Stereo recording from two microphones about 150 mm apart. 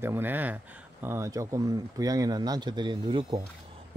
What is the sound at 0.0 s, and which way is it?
Speech, 15° right (ahead or behind).